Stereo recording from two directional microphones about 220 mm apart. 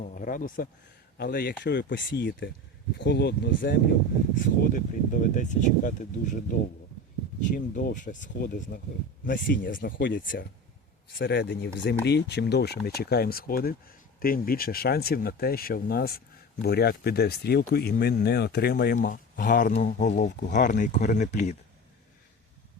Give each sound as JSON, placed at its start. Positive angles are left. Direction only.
{"t": 0.0, "sound": "speech", "side_deg": 40}
{"t": 7.4, "sound": "speech", "side_deg": 40}
{"t": 10.0, "sound": "speech", "side_deg": 55}
{"t": 10.2, "sound": "speech", "side_deg": 40}
{"t": 11.2, "sound": "speech", "side_deg": 55}